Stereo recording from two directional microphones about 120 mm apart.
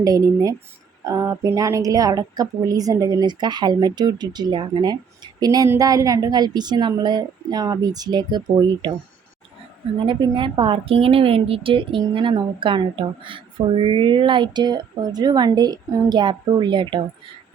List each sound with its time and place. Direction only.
0.0 s speech: 30° right (ahead or behind)
10.1 s a woman's voice: 40° right (ahead or behind)